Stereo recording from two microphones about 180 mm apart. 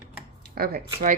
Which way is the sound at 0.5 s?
55° right (ahead or behind).